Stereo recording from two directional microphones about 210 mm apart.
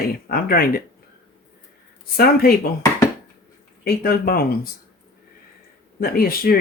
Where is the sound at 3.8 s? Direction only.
45° left (ahead or behind).